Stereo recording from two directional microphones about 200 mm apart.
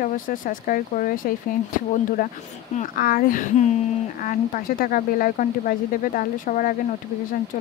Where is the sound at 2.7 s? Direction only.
45° left (ahead or behind).